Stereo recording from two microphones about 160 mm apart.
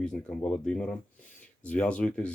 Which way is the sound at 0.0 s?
5° left (ahead or behind).